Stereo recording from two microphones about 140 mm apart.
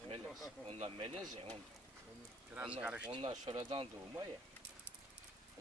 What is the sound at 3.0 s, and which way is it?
Speech, 35° right (ahead or behind).